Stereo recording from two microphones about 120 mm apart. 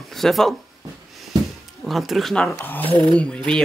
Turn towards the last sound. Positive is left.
turn(degrees=5)  # may be behind; listen again after turning